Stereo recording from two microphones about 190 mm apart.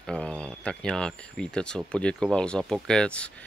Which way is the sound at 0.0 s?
5° left (ahead or behind).